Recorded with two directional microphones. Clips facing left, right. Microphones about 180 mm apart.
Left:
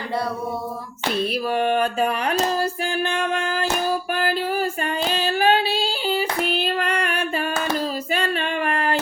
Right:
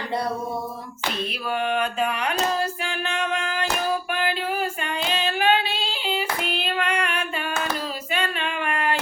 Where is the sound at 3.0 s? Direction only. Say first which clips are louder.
Left 3 dB; 40° left (ahead or behind).